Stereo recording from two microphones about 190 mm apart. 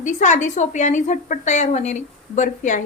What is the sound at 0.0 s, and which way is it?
A woman's voice, 40° left (ahead or behind).